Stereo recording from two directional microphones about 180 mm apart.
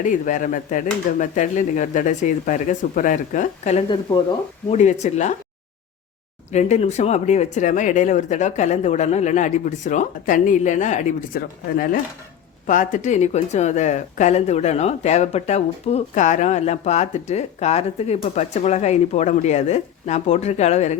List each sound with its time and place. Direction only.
0.0 s speech: 45° left (ahead or behind)
6.5 s speech: 40° left (ahead or behind)